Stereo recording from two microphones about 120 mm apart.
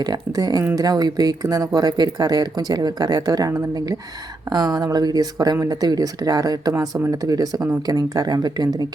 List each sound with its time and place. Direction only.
0.0 s speech: 35° right (ahead or behind)